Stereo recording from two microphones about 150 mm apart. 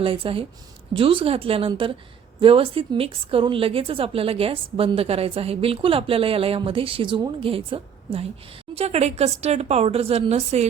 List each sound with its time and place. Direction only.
0.0 s a woman's voice: 35° right (ahead or behind)